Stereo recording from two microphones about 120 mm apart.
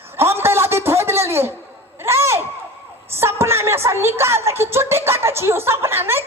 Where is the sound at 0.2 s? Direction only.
20° right (ahead or behind).